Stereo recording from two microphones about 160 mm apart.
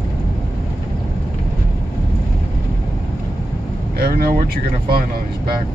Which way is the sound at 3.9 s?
70° right (ahead or behind).